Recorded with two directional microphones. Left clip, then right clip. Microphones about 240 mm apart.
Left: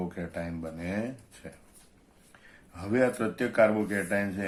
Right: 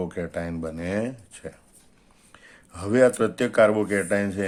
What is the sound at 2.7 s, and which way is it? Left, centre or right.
Speech, right.